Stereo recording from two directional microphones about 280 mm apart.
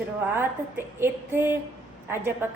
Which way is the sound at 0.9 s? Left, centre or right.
Centre.